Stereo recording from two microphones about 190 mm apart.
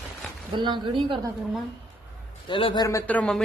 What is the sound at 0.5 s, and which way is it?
Speech, 25° right (ahead or behind).